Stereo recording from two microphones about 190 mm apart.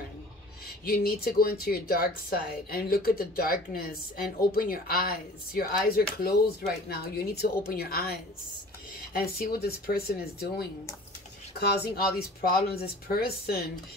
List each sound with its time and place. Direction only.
0.8 s speech: 50° left (ahead or behind)